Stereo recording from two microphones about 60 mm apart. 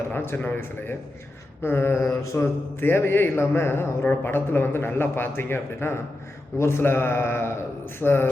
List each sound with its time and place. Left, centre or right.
0.1 s a man's voice: left
2.8 s a man's voice: left